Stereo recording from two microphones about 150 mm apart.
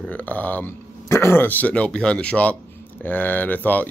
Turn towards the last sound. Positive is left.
turn(degrees=10)  # may be behind; listen again after turning